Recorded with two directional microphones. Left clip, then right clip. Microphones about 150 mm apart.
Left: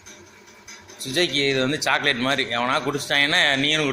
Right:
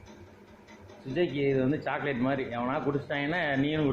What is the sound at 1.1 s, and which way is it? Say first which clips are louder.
Speech: left 7 dB; 20° left (ahead or behind).